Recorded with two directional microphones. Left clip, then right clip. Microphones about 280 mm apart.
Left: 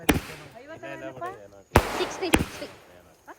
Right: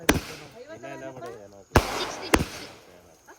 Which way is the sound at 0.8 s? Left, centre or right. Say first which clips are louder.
Left 1 dB; right.